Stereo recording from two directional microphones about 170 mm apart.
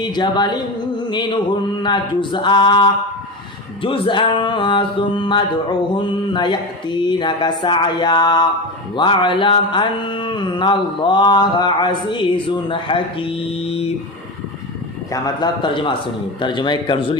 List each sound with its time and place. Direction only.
0.0 s mantra: 25° left (ahead or behind)
15.1 s mantra: 25° left (ahead or behind)